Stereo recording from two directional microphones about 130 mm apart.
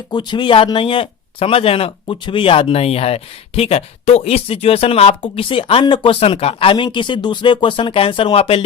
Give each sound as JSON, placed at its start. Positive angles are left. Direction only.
{"t": 0.1, "sound": "speech", "side_deg": 35}